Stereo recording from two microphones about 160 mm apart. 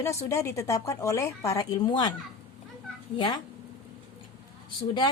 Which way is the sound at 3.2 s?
25° left (ahead or behind).